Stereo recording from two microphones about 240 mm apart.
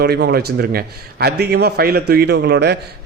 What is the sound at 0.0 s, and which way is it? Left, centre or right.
A man's voice, right.